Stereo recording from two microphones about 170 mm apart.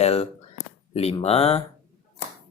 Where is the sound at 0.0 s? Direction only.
35° left (ahead or behind).